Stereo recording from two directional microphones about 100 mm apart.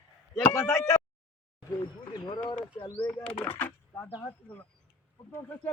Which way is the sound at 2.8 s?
35° left (ahead or behind).